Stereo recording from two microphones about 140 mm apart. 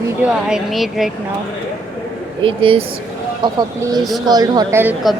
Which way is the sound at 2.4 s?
40° right (ahead or behind).